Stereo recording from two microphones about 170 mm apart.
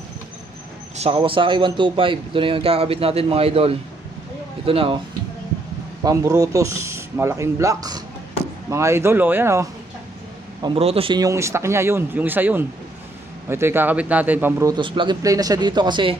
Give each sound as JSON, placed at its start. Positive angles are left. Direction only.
{"t": 1.1, "sound": "speech", "side_deg": -30}
{"t": 6.0, "sound": "speech", "side_deg": -20}
{"t": 10.6, "sound": "speech", "side_deg": -35}